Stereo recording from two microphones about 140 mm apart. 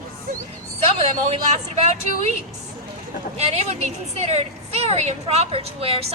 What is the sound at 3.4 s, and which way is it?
Speech, 50° right (ahead or behind).